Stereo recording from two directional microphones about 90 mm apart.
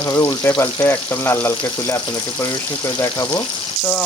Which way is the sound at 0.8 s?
25° left (ahead or behind).